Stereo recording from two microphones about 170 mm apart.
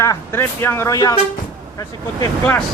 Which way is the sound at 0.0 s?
15° left (ahead or behind).